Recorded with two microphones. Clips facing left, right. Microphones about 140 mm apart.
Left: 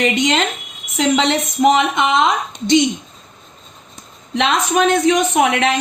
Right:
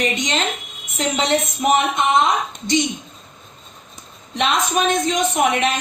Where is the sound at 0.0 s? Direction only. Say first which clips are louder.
Left 5 dB; 90° left.